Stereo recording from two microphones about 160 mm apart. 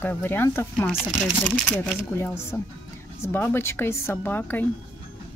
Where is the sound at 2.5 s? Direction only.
20° left (ahead or behind).